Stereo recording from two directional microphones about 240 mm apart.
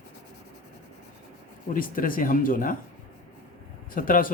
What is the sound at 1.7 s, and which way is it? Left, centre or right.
Speech, left.